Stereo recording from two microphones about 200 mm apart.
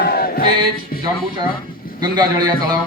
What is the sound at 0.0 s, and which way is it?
Music, 50° left (ahead or behind).